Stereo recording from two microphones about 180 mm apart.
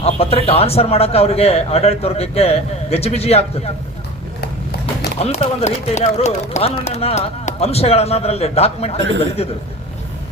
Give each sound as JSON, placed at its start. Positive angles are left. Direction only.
{"t": 0.0, "sound": "speech", "side_deg": 35}
{"t": 5.2, "sound": "speech", "side_deg": 35}
{"t": 9.0, "sound": "speech", "side_deg": -80}